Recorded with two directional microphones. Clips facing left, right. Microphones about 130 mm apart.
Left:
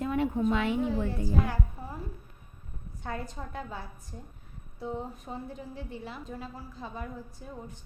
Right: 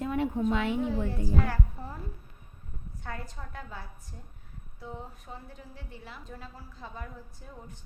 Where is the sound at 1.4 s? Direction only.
15° left (ahead or behind).